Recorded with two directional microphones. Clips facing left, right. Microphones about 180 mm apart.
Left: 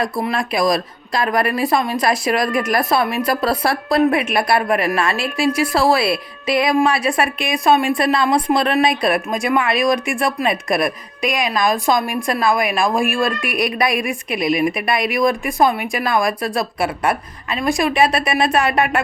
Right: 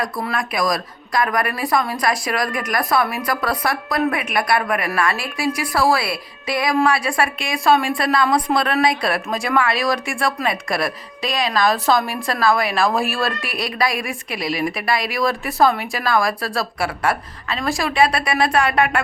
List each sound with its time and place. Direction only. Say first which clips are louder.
0.0 s a woman's voice: left 3 dB; 25° left (ahead or behind)